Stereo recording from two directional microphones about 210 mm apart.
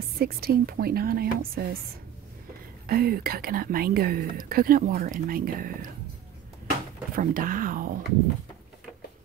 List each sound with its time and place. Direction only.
0.2 s speech: 45° right (ahead or behind)
2.9 s speech: 45° right (ahead or behind)
7.2 s speech: 40° right (ahead or behind)